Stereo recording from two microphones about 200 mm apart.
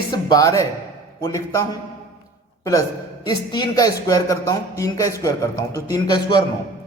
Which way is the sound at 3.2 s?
20° left (ahead or behind).